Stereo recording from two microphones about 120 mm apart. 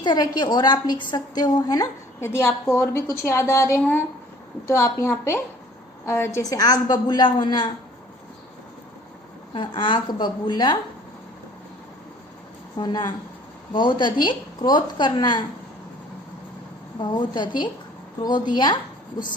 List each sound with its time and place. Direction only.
0.0 s a woman's voice: 40° left (ahead or behind)
9.6 s a woman's voice: 45° left (ahead or behind)
12.8 s a woman's voice: 35° left (ahead or behind)
17.0 s a woman's voice: 40° left (ahead or behind)